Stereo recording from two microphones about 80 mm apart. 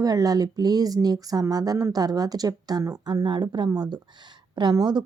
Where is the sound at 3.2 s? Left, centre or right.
Right.